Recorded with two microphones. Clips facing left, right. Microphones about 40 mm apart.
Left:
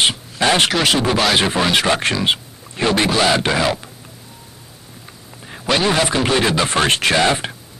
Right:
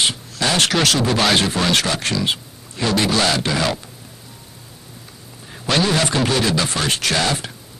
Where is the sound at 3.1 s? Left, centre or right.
Centre.